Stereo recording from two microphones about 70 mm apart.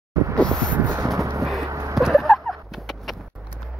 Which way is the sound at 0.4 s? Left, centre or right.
Centre.